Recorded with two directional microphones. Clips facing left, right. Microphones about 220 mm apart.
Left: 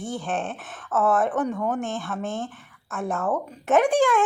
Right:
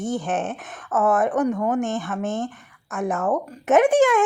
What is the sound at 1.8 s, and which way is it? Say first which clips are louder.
Speech: right 4 dB; 15° right (ahead or behind).